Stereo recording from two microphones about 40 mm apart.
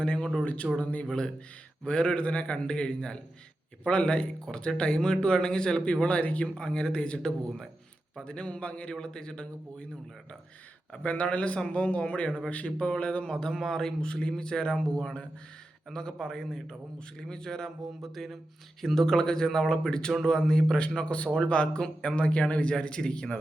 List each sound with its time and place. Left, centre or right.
0.0 s a sound: left
0.4 s a man's voice: left
1.0 s a man's voice: centre
6.5 s a man's voice: left
9.0 s a man's voice: centre
11.0 s a man's voice: left
13.2 s a man's voice: centre